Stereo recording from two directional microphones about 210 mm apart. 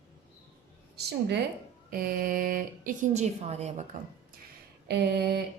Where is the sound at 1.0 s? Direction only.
50° right (ahead or behind); by 3.9 s 30° right (ahead or behind).